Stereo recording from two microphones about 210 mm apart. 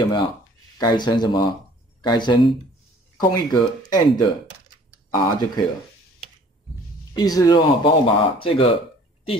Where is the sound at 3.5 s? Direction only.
20° left (ahead or behind).